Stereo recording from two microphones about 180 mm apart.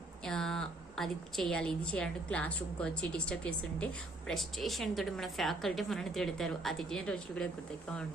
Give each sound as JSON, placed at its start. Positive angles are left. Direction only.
{"t": 0.3, "sound": "a woman's voice", "side_deg": 5}